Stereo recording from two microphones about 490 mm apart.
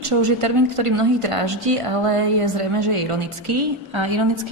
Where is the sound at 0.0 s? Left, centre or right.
Right.